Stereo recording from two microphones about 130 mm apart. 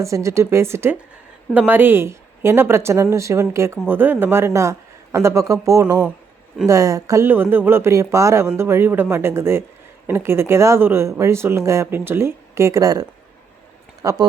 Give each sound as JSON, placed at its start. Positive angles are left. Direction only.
{"t": 0.0, "sound": "speech", "side_deg": -25}